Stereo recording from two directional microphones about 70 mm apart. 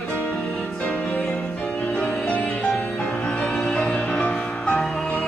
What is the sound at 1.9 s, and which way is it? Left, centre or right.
Music, centre.